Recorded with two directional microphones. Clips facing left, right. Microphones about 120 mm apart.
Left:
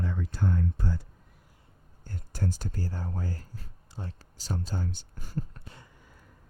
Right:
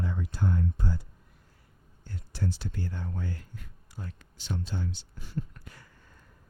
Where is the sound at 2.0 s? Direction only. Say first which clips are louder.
Left 1 dB; 45° left (ahead or behind); by 5.8 s 30° left (ahead or behind).